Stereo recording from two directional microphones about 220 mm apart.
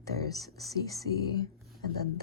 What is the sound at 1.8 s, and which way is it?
Speech, 45° right (ahead or behind).